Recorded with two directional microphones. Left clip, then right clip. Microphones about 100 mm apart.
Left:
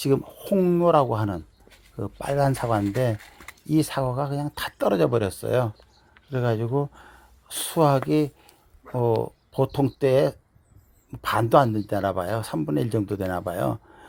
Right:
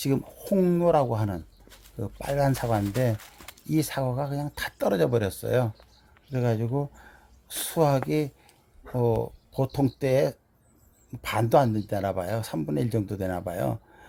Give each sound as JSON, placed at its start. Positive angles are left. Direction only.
{"t": 0.0, "sound": "speech", "side_deg": 15}
{"t": 0.4, "sound": "speech", "side_deg": 5}
{"t": 0.9, "sound": "speech", "side_deg": 15}